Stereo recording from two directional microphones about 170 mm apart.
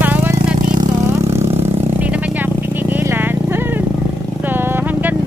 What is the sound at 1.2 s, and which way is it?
Vehicle, 40° right (ahead or behind).